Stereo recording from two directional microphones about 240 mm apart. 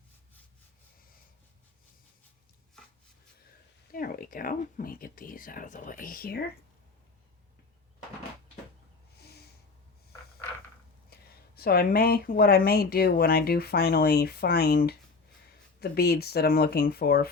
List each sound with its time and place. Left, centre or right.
3.9 s speech: left
11.1 s speech: left